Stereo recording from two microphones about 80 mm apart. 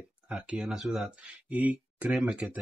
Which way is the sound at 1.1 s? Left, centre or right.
Centre.